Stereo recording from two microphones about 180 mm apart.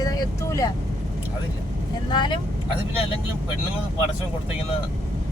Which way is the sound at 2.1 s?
25° left (ahead or behind).